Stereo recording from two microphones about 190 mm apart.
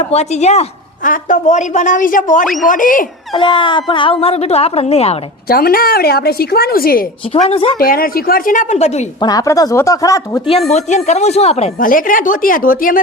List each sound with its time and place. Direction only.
0.1 s a woman's voice: 35° left (ahead or behind)
3.3 s a woman's voice: 25° left (ahead or behind)
5.5 s a woman's voice: 50° left (ahead or behind); by 9.0 s 35° left (ahead or behind)
9.2 s speech: 20° left (ahead or behind)
10.7 s a woman's voice: 35° left (ahead or behind)